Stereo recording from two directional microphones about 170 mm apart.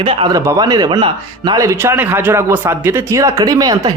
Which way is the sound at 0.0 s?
30° right (ahead or behind).